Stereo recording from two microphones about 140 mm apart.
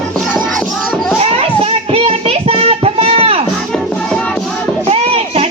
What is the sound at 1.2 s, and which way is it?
Child singing, 45° right (ahead or behind).